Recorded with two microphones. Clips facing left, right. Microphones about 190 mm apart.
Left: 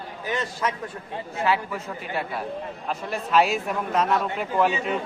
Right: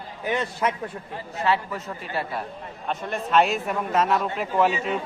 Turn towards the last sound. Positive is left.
turn(degrees=0)  # may be behind; listen again after turning